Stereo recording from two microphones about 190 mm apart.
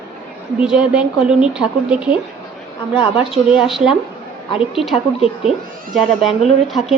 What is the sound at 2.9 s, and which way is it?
Speech, 25° left (ahead or behind).